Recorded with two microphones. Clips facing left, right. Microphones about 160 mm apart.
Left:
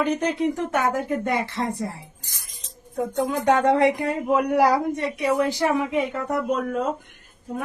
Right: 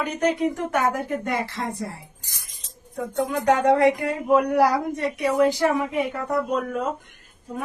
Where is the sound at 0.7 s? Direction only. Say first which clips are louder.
Even; 20° left (ahead or behind).